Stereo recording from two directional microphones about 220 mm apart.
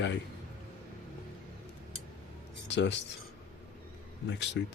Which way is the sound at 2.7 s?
55° left (ahead or behind).